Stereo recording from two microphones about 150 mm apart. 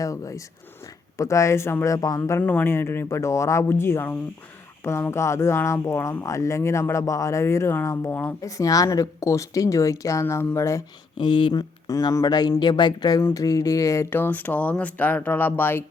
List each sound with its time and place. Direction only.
0.0 s speech: 20° left (ahead or behind)
2.4 s speech: 10° left (ahead or behind)
11.2 s speech: 35° left (ahead or behind); by 15.8 s 15° left (ahead or behind)